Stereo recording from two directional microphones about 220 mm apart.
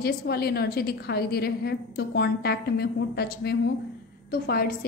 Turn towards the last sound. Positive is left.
turn(degrees=45)  # may be behind; listen again after turning